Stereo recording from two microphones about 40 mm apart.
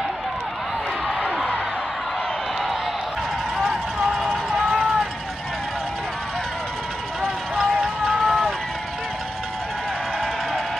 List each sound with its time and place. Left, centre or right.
1.0 s music: centre
3.5 s run: centre
4.3 s run: centre
8.1 s run: centre